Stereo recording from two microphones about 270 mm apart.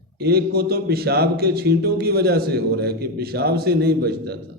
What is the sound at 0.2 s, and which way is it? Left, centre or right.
A man's voice, right.